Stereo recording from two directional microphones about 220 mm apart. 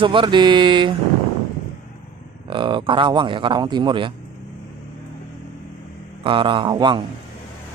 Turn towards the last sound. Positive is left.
turn(degrees=-20)  # may be behind; listen again after turning